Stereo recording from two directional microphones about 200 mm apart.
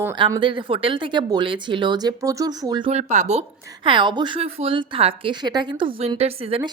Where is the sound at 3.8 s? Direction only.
25° right (ahead or behind).